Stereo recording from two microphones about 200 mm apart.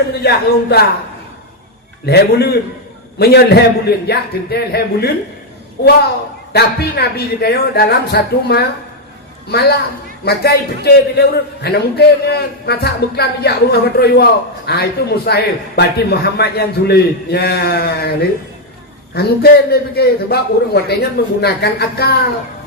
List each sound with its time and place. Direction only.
0.1 s a man's voice: 55° left (ahead or behind)
2.0 s a man's voice: 50° left (ahead or behind)